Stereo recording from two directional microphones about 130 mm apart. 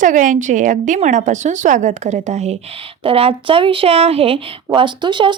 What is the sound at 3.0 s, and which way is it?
Speech, 45° right (ahead or behind).